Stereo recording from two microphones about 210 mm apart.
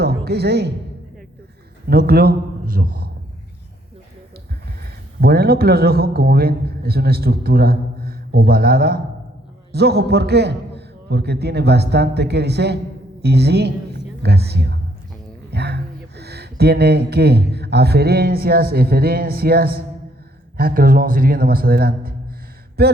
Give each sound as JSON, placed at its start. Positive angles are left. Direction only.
{"t": 0.0, "sound": "music", "side_deg": -50}
{"t": 1.9, "sound": "a man's voice", "side_deg": -50}
{"t": 5.2, "sound": "a man's voice", "side_deg": -45}